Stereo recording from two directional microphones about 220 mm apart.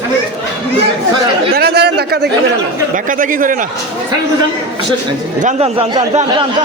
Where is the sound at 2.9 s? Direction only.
35° right (ahead or behind).